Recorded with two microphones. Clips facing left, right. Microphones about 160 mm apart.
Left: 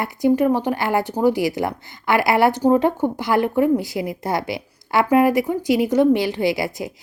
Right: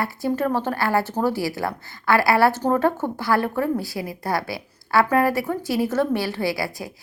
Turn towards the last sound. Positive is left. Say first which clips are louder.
# left 4 dB
turn(degrees=20)  # may be behind; listen again after turning